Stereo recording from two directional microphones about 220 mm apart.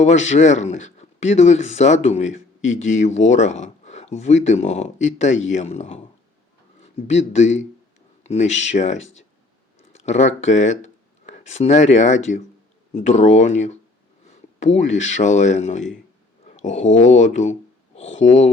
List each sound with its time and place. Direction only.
0.0 s speech: 30° left (ahead or behind)